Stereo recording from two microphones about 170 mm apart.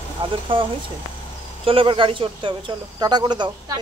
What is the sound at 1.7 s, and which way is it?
Speech, 30° right (ahead or behind).